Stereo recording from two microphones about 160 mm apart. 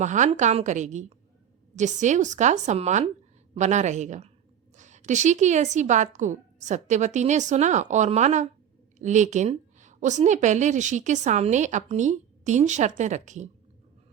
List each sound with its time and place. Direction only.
0.0 s a woman's voice: 50° right (ahead or behind)